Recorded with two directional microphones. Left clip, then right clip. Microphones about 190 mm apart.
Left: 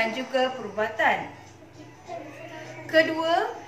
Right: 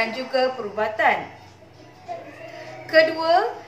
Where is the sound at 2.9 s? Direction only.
15° right (ahead or behind).